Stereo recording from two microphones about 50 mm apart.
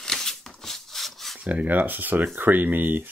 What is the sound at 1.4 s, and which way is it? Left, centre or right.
Speech, right.